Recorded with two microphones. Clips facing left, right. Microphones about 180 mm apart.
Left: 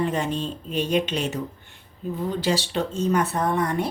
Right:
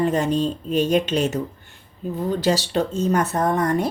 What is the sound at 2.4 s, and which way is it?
A woman's voice, 40° right (ahead or behind).